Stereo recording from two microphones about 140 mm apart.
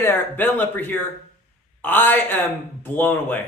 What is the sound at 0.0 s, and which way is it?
A man's voice, 15° left (ahead or behind).